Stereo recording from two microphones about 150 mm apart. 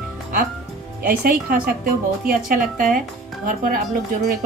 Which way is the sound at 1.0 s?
75° right (ahead or behind).